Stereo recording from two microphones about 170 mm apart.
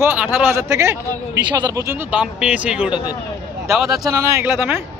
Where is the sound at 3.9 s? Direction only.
20° right (ahead or behind).